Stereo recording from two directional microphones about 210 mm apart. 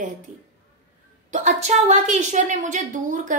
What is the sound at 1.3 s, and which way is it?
A woman's voice, 35° right (ahead or behind).